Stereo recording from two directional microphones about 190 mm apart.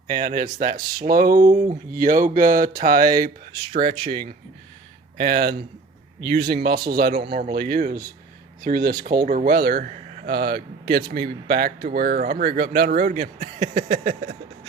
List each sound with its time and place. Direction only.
0.1 s speech: 45° right (ahead or behind)
3.5 s speech: 20° right (ahead or behind)
5.1 s speech: 50° right (ahead or behind)